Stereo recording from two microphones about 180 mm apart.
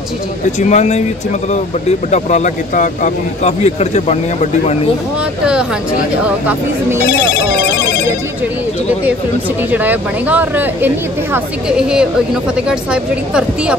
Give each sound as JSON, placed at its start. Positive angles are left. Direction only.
{"t": 0.6, "sound": "speech", "side_deg": 40}
{"t": 5.4, "sound": "speech", "side_deg": -5}
{"t": 9.7, "sound": "speech", "side_deg": -10}